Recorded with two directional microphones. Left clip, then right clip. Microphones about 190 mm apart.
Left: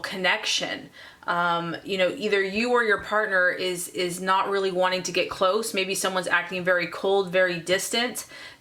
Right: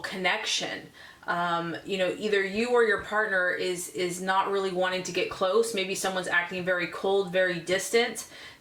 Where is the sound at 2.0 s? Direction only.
25° left (ahead or behind).